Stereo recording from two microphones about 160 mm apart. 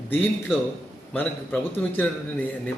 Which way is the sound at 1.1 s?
10° left (ahead or behind).